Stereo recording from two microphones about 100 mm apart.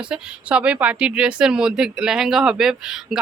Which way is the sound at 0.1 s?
10° right (ahead or behind).